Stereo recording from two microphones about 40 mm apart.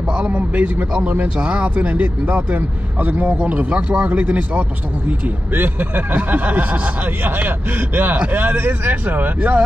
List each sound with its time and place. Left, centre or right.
0.1 s a sound: right
0.4 s speech: right
5.6 s speech: right